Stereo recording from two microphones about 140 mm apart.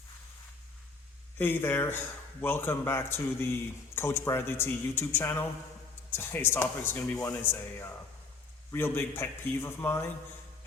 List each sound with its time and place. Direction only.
1.4 s speech: 15° left (ahead or behind)